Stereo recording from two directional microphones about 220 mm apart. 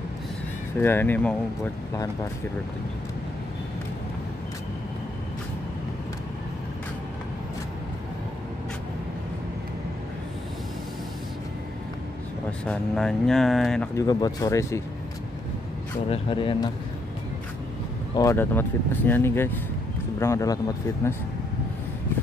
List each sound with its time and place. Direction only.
0.7 s speech: 10° left (ahead or behind)
12.6 s speech: centre (ahead or behind)
13.9 s speech: 15° left (ahead or behind)
16.1 s speech: 20° left (ahead or behind)
18.1 s speech: 15° left (ahead or behind)